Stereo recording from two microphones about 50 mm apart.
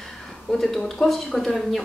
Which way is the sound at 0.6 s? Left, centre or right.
Centre.